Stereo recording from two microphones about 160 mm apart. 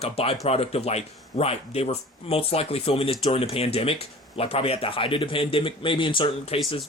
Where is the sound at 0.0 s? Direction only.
40° left (ahead or behind).